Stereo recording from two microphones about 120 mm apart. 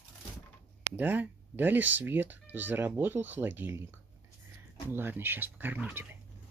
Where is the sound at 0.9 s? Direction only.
15° right (ahead or behind).